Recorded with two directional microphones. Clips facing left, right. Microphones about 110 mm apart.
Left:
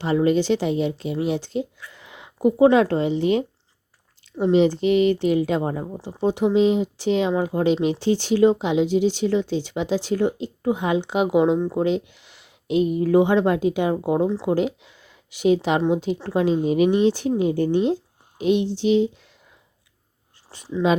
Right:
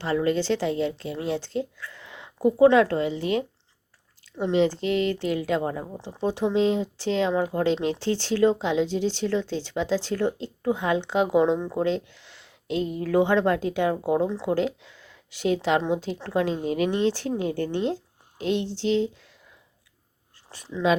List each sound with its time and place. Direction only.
0.0 s speech: 20° left (ahead or behind)
5.8 s speech: 10° left (ahead or behind)
11.8 s speech: 15° left (ahead or behind)
20.8 s speech: 5° left (ahead or behind)